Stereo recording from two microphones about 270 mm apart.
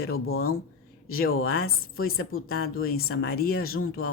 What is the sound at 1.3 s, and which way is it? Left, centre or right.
Speech, left.